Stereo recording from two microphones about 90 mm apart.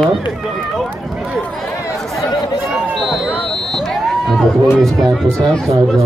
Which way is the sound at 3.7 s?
5° left (ahead or behind).